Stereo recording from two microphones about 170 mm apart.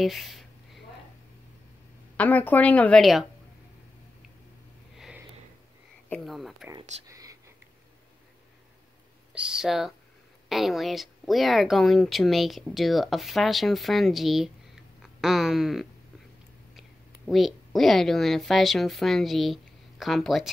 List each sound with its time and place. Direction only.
0.0 s a sound: centre (ahead or behind)
2.1 s a woman's voice: 10° left (ahead or behind)
4.9 s sniff: 5° right (ahead or behind)
6.0 s speech: 5° left (ahead or behind)
7.1 s whispering: 20° right (ahead or behind)
9.3 s speech: 5° right (ahead or behind)
17.3 s speech: centre (ahead or behind)